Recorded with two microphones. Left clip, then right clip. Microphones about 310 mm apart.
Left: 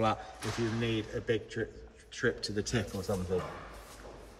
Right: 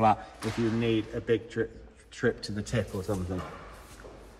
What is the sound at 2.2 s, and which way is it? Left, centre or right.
Speech, right.